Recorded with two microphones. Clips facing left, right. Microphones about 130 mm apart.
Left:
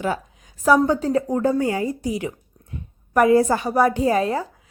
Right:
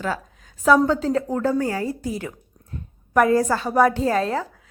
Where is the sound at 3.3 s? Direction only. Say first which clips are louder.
Left 1 dB; 20° left (ahead or behind).